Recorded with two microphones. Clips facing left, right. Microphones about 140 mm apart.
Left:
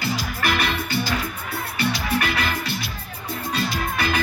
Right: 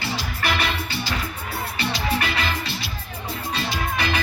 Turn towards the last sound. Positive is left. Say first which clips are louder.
# left 1 dB
turn(degrees=45)  # may be behind; listen again after turning